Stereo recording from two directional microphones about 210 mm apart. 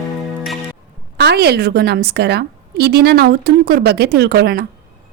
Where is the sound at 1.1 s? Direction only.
50° right (ahead or behind).